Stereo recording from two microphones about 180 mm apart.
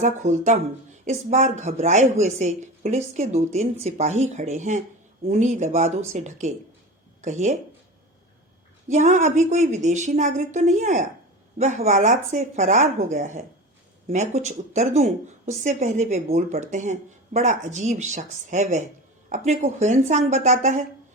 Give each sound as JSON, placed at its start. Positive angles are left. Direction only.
{"t": 0.0, "sound": "a woman's voice", "side_deg": -40}
{"t": 8.9, "sound": "a woman's voice", "side_deg": -40}